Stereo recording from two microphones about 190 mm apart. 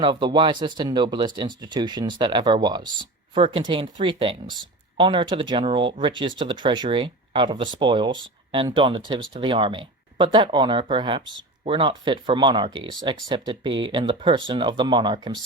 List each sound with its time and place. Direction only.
0.0 s speech: 25° right (ahead or behind)